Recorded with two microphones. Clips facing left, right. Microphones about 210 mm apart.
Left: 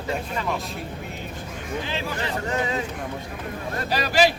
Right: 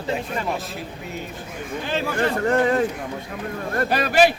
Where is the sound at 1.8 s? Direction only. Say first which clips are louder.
Right 10 dB; 50° right (ahead or behind).